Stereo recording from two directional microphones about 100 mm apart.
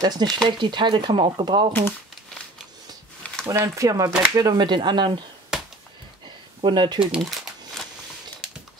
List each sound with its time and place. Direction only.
0.0 s speech: 40° right (ahead or behind)
0.4 s speech: 50° right (ahead or behind)
1.7 s speech: 20° left (ahead or behind)
3.4 s speech: 30° right (ahead or behind)
4.4 s speech: 45° right (ahead or behind)
5.5 s a sound: 5° right (ahead or behind)
6.6 s speech: 50° right (ahead or behind)
7.0 s speech: 5° right (ahead or behind)